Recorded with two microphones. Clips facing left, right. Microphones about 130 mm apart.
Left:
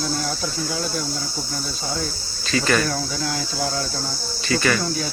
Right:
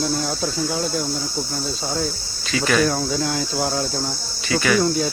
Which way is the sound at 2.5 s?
5° right (ahead or behind).